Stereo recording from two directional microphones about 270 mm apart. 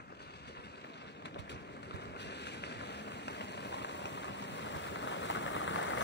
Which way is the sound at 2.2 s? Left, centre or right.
Left.